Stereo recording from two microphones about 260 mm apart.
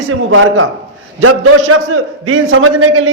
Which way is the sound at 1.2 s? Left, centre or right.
Right.